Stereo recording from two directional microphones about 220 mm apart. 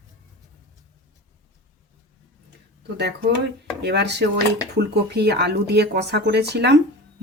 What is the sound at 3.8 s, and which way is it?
Speech, 50° right (ahead or behind).